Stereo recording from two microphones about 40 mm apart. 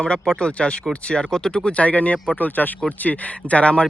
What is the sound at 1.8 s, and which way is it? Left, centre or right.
Speech, left.